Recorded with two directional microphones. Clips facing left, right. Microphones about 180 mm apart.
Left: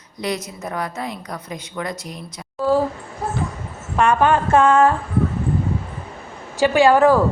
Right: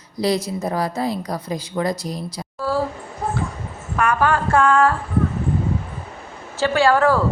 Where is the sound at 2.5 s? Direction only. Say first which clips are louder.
Left 5 dB; 20° left (ahead or behind).